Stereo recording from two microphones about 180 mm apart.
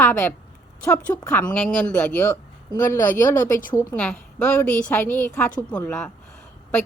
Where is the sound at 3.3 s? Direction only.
20° left (ahead or behind).